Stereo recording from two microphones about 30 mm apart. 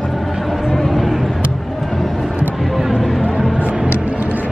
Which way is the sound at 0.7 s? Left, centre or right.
Centre.